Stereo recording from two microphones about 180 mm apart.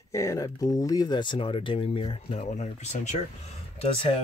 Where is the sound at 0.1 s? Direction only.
15° left (ahead or behind); by 3.2 s 40° left (ahead or behind).